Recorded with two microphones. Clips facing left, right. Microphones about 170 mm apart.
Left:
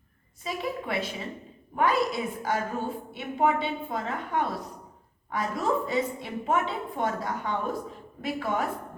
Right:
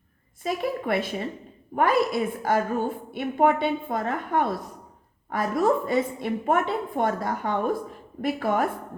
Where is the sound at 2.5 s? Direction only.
50° right (ahead or behind).